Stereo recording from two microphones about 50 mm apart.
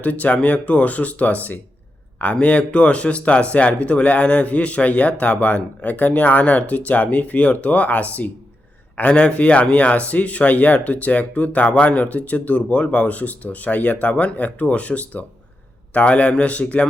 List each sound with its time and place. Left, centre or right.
0.0 s speech: left